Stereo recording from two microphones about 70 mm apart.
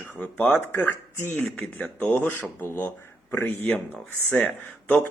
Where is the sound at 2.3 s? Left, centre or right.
Left; by 5.0 s centre.